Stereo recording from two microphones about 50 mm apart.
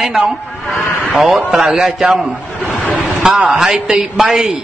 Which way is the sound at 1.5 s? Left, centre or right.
Centre.